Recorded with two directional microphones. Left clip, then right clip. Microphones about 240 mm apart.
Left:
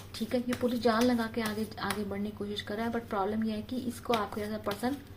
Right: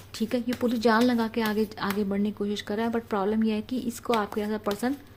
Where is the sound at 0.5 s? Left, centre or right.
Right.